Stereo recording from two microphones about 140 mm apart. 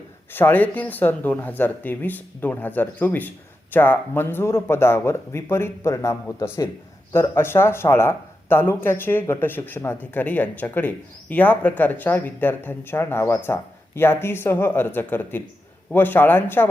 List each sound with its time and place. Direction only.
0.3 s speech: 15° left (ahead or behind)